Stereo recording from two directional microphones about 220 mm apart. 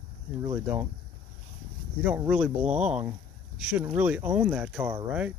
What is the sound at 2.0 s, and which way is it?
Speech, 5° right (ahead or behind).